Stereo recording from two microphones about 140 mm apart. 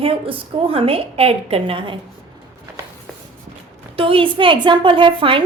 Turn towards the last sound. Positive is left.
turn(degrees=-35)  # may be behind; listen again after turning